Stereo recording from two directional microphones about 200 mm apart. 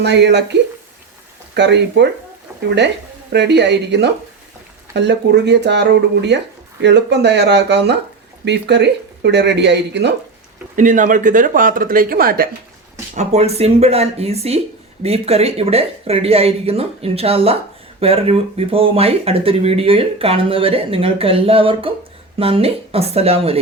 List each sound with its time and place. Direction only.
0.0 s speech: 60° right (ahead or behind)
1.5 s speech: 60° right (ahead or behind)
10.8 s speech: 40° right (ahead or behind)
13.1 s speech: 30° right (ahead or behind)